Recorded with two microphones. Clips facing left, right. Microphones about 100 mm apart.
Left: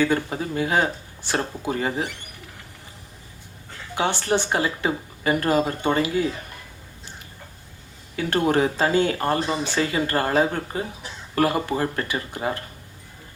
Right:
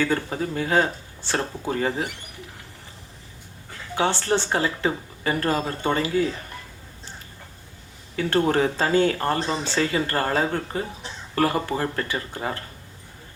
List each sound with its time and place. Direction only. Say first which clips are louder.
0.0 s speech: left 2 dB; 15° left (ahead or behind)
3.9 s speech: even; 15° left (ahead or behind)
8.1 s speech: even; 15° left (ahead or behind)